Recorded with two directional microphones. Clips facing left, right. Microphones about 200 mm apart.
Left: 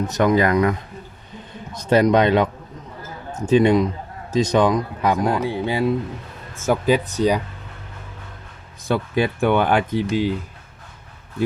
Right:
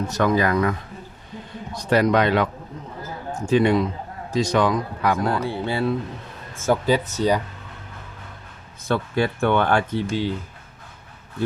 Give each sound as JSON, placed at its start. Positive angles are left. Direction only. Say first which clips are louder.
{"t": 0.1, "sound": "a man's voice", "louder": "left 3 dB", "side_deg": 20}
{"t": 8.9, "sound": "speech", "louder": "left 2 dB", "side_deg": 15}